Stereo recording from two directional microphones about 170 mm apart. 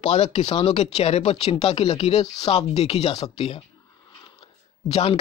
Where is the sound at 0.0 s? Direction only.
40° left (ahead or behind).